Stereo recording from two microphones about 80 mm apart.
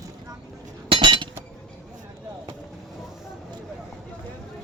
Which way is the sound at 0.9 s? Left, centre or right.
Right.